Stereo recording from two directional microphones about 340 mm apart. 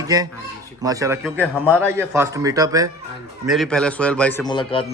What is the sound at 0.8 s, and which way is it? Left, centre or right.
A man's voice, centre.